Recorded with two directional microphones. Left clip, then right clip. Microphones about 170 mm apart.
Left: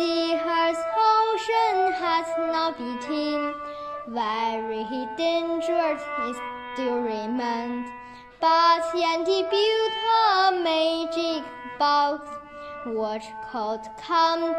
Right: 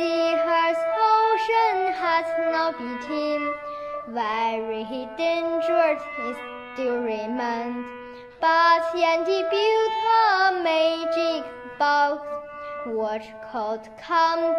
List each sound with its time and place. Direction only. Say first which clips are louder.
0.0 s child singing: right 2 dB; 20° left (ahead or behind)
4.1 s music: right 1 dB; 20° left (ahead or behind)
6.8 s child singing: right 1 dB; 20° left (ahead or behind)
13.0 s music: right 1 dB; 20° left (ahead or behind)